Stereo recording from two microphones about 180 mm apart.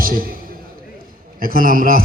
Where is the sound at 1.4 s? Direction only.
55° right (ahead or behind).